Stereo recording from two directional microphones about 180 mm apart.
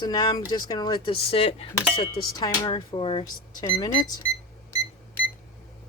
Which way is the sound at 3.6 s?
20° left (ahead or behind).